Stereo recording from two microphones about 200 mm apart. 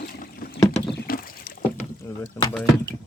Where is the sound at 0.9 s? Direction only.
50° left (ahead or behind).